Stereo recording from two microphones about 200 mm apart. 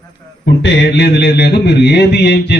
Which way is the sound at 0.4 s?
60° left (ahead or behind).